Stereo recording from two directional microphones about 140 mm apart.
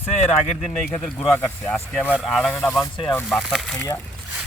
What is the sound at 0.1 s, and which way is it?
Speech, 50° left (ahead or behind).